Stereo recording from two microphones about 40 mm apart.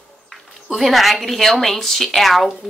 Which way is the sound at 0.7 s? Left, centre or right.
Centre.